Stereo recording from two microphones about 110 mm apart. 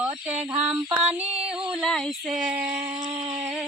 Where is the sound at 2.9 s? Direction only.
50° right (ahead or behind).